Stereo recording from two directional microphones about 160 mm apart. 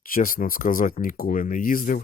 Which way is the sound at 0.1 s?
60° left (ahead or behind).